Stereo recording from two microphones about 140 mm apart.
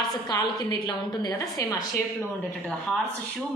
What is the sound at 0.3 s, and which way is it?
A woman's voice, 30° left (ahead or behind).